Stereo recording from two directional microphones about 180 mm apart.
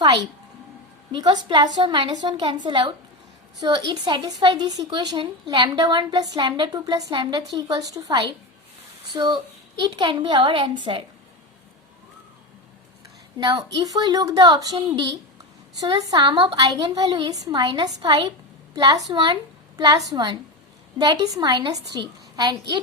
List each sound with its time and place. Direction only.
1.1 s a woman's voice: 25° right (ahead or behind)
13.7 s a woman's voice: 20° right (ahead or behind)